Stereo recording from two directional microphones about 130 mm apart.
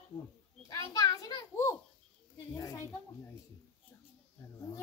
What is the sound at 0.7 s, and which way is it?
A child's voice, 25° left (ahead or behind).